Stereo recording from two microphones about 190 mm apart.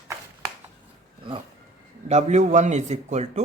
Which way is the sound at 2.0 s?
35° right (ahead or behind).